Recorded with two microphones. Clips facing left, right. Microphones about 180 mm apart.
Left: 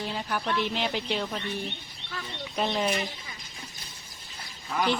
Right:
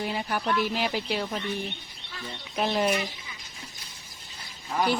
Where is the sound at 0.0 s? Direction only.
10° right (ahead or behind).